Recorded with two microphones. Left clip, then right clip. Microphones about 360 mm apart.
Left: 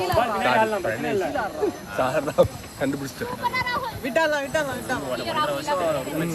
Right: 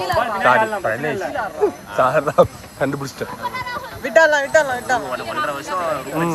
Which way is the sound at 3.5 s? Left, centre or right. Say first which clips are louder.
Left 3 dB; left.